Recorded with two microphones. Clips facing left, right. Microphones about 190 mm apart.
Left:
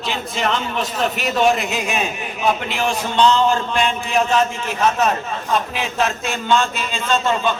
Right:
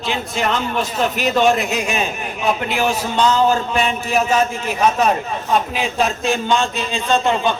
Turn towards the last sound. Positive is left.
turn(degrees=-15)  # may be behind; listen again after turning